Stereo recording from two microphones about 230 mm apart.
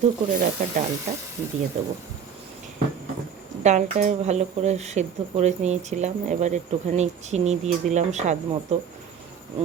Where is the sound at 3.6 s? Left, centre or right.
Right.